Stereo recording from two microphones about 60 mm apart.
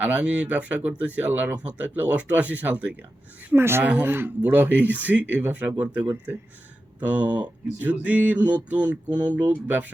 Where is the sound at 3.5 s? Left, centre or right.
Right.